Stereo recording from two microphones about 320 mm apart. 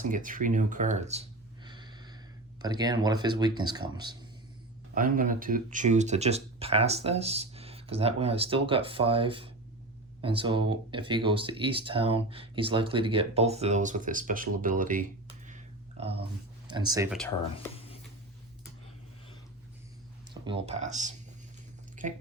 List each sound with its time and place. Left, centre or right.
0.0 s speech: right
1.6 s a sound: centre
3.6 s speech: centre
4.9 s speech: right
17.1 s speech: centre
20.3 s speech: centre